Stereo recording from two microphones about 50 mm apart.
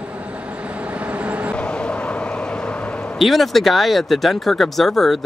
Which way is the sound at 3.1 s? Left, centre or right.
Centre.